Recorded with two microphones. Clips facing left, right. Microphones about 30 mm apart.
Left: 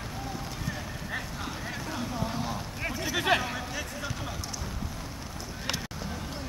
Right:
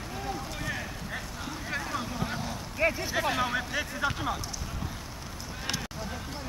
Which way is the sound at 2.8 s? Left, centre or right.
Centre.